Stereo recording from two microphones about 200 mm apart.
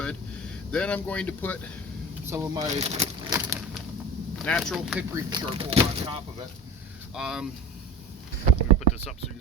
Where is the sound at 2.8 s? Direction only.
30° right (ahead or behind).